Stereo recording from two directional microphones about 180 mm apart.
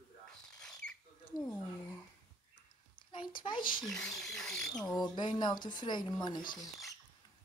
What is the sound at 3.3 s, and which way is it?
Speech, 25° left (ahead or behind).